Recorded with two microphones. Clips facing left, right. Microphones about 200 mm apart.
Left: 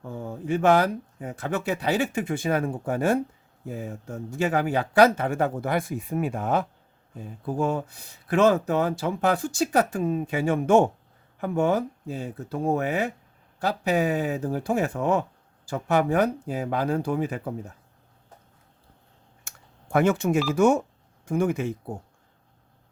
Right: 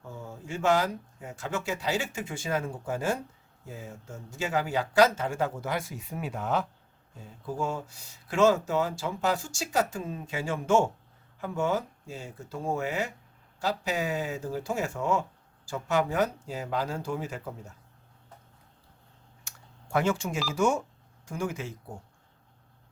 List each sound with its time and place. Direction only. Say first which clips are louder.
0.0 s speech: left 8 dB; 55° left (ahead or behind)
19.5 s telephone dialing: left 5 dB; 55° left (ahead or behind)
20.5 s speech: left 4 dB; 55° left (ahead or behind)